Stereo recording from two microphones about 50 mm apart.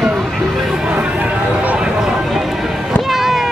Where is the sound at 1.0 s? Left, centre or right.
Right.